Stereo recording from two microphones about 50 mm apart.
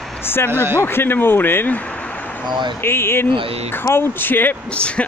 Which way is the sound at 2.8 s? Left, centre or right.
Left.